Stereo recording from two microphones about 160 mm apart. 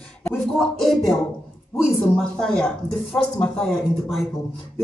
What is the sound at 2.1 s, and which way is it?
A woman's voice, 5° left (ahead or behind).